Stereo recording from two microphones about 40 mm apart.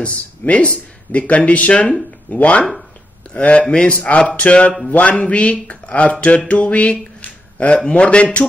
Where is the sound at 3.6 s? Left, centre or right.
Left.